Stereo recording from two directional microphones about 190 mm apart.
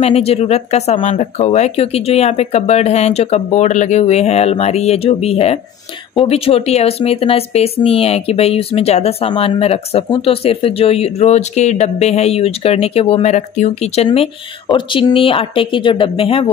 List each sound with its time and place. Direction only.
0.0 s speech: 30° left (ahead or behind)